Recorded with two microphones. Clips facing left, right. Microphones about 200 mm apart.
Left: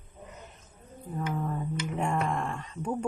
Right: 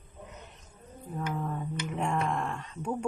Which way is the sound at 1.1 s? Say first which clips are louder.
Left 2 dB; centre (ahead or behind).